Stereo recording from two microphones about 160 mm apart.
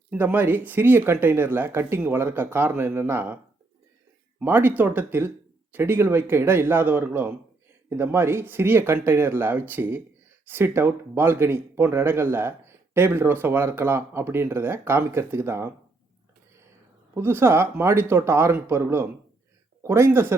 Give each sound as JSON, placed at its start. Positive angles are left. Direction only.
{"t": 0.1, "sound": "a man's voice", "side_deg": -10}
{"t": 4.4, "sound": "a man's voice", "side_deg": -15}
{"t": 17.2, "sound": "a man's voice", "side_deg": -15}